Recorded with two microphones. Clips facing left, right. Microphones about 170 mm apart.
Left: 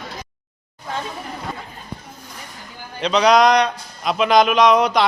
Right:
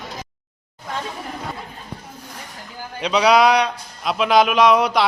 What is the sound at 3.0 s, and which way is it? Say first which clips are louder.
Speech: left 1 dB; 10° right (ahead or behind).